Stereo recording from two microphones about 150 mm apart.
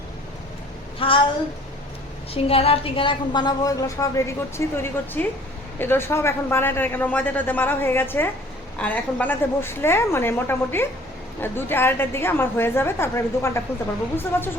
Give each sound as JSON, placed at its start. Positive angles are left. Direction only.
{"t": 0.9, "sound": "speech", "side_deg": 35}
{"t": 2.3, "sound": "a woman's voice", "side_deg": 40}